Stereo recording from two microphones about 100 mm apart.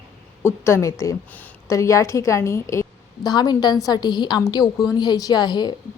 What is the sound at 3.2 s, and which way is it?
A woman's voice, 45° left (ahead or behind).